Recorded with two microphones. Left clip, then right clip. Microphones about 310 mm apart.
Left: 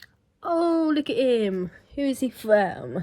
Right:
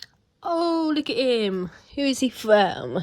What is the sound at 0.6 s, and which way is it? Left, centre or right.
Speech, centre.